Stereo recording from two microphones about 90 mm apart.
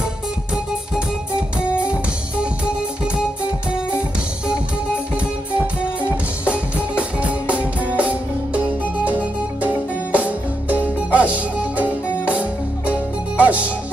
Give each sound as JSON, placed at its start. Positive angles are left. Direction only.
{"t": 1.9, "sound": "music", "side_deg": -15}
{"t": 4.5, "sound": "music", "side_deg": -15}